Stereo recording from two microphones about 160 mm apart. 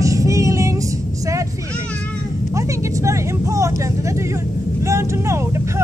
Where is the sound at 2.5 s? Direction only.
20° right (ahead or behind).